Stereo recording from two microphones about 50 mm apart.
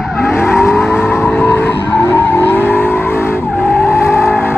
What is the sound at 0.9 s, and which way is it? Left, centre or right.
Vehicle, left.